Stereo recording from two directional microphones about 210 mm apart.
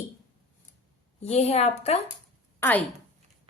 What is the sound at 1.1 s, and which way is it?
Speech, 30° left (ahead or behind).